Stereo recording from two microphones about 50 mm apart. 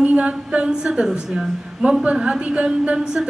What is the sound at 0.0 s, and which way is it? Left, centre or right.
A woman's voice, right.